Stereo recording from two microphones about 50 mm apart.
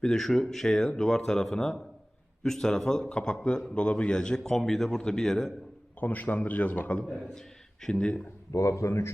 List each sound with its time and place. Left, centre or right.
0.0 s a man's voice: centre
6.0 s a man's voice: left
7.0 s a man's voice: centre
8.5 s speech: left